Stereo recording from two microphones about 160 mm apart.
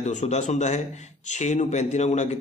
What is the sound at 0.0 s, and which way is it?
Speech, 45° left (ahead or behind).